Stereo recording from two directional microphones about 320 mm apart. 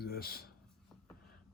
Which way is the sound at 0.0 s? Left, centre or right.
Left.